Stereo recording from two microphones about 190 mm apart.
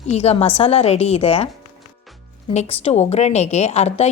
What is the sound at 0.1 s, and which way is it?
A woman's voice, 35° left (ahead or behind).